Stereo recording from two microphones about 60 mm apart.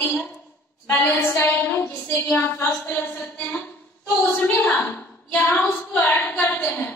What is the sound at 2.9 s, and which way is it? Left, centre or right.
A woman's voice, left.